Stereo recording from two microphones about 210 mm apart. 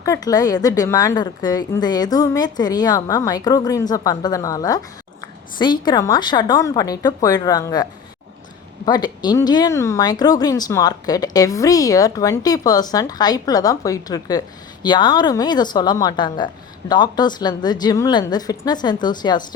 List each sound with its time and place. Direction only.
0.0 s speech: 15° left (ahead or behind)